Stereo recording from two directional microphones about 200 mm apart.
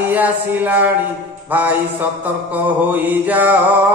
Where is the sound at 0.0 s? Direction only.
10° right (ahead or behind).